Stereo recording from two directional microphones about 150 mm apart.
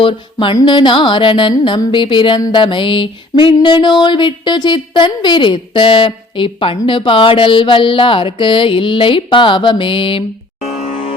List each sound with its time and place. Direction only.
0.0 s music: 35° left (ahead or behind)
10.8 s music: 50° left (ahead or behind)